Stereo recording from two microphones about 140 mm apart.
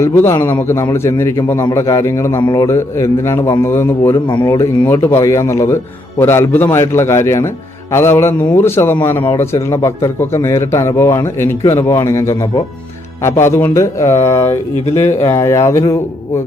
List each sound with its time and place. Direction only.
0.0 s a man's voice: 15° left (ahead or behind)